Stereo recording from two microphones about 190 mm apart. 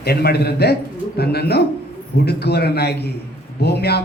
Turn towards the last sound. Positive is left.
turn(degrees=60)  # may be behind; listen again after turning